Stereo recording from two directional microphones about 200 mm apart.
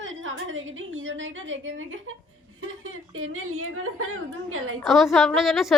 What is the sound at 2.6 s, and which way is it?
A woman's voice, 85° right.